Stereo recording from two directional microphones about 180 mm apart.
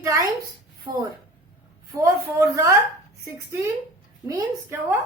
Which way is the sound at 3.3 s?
15° right (ahead or behind).